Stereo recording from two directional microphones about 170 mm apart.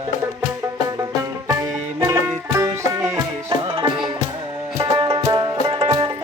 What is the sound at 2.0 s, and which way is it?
Music, 20° right (ahead or behind).